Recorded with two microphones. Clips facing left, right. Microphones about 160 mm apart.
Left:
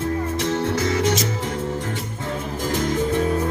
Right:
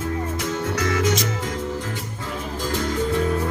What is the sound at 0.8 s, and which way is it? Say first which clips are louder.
Music: right 2 dB; 30° left (ahead or behind).